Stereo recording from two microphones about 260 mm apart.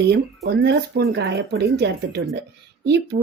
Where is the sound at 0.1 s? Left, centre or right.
Right.